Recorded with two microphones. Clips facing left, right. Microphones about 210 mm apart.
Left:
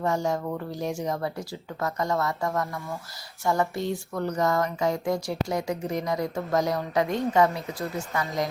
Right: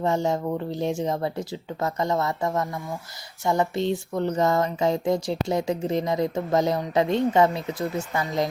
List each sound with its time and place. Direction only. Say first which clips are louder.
0.0 s speech: right 3 dB; 25° right (ahead or behind)